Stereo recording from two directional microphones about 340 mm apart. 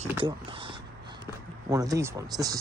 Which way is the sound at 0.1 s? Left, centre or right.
Centre.